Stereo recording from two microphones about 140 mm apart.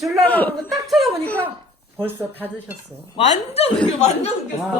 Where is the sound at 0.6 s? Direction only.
Centre (ahead or behind).